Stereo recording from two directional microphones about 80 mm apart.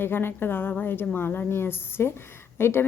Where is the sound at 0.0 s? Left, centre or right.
Left.